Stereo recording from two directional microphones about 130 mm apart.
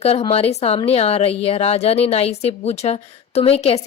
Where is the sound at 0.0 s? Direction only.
50° left (ahead or behind).